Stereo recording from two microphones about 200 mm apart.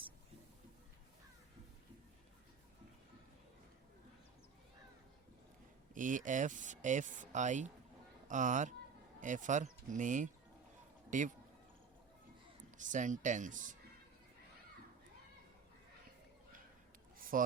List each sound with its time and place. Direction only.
5.9 s speech: 40° right (ahead or behind)
12.7 s speech: 40° right (ahead or behind)
17.2 s a sound: 45° right (ahead or behind)